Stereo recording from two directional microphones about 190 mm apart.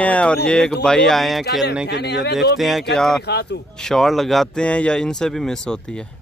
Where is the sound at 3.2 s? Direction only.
60° left (ahead or behind).